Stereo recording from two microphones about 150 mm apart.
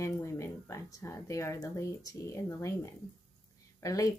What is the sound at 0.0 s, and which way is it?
Speech, 20° left (ahead or behind).